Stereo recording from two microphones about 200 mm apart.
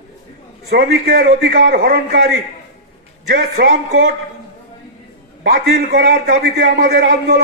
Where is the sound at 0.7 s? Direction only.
50° right (ahead or behind).